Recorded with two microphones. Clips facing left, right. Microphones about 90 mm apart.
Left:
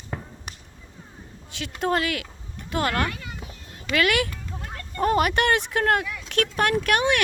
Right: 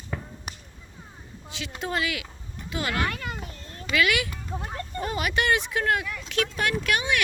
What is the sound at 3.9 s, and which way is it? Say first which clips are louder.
Speech: left 2 dB; 50° left (ahead or behind).